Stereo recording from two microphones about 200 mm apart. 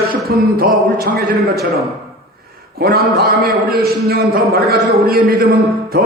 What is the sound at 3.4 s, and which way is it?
A man's voice, 50° right (ahead or behind).